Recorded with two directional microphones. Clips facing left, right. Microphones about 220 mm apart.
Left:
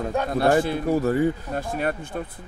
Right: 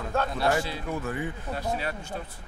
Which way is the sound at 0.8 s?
40° left (ahead or behind).